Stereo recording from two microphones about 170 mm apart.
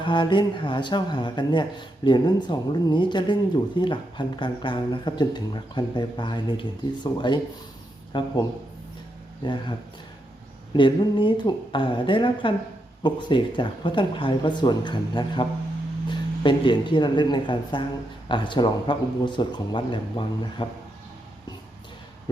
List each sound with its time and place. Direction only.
0.0 s speech: 30° left (ahead or behind)
9.4 s speech: 30° left (ahead or behind)
10.8 s speech: 30° left (ahead or behind)